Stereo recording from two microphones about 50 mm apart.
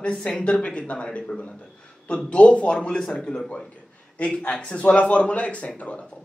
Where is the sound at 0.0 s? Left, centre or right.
Left.